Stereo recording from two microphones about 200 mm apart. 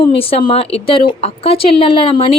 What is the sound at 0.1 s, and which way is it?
A woman's voice, 30° left (ahead or behind).